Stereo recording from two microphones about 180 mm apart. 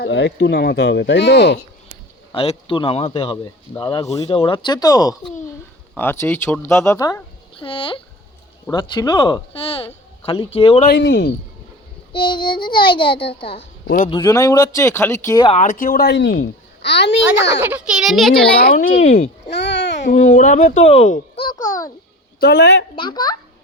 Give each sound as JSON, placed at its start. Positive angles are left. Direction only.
{"t": 0.0, "sound": "a child's voice", "side_deg": 75}
{"t": 2.3, "sound": "speech", "side_deg": 30}
{"t": 4.3, "sound": "speech", "side_deg": 30}
{"t": 7.6, "sound": "speech", "side_deg": 30}
{"t": 10.8, "sound": "a child's voice", "side_deg": 75}
{"t": 12.1, "sound": "speech", "side_deg": 25}
{"t": 15.4, "sound": "a child's voice", "side_deg": 45}
{"t": 17.5, "sound": "a child's voice", "side_deg": -10}
{"t": 19.5, "sound": "babbling", "side_deg": 75}
{"t": 20.1, "sound": "speech", "side_deg": 40}
{"t": 21.4, "sound": "speech", "side_deg": 20}
{"t": 22.4, "sound": "a child's voice", "side_deg": 65}
{"t": 23.0, "sound": "speech", "side_deg": 25}